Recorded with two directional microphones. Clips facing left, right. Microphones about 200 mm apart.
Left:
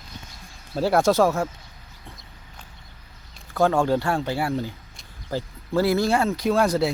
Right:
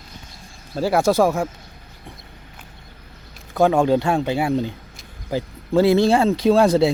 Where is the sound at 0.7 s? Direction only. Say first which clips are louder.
Right 1 dB; centre (ahead or behind).